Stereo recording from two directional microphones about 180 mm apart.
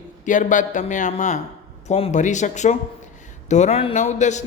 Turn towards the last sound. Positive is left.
turn(degrees=40)  # may be behind; listen again after turning